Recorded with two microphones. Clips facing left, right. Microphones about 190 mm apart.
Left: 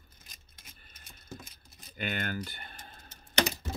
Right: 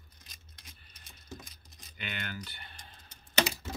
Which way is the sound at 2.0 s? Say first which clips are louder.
Left 6 dB; 45° left (ahead or behind).